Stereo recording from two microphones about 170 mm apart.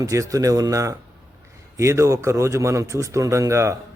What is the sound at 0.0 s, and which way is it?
A man's voice, 20° right (ahead or behind).